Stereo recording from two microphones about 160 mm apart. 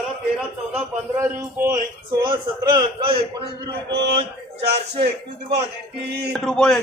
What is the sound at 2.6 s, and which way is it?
Speech, 25° right (ahead or behind).